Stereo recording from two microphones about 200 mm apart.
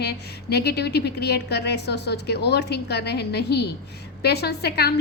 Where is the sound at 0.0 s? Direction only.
55° left (ahead or behind).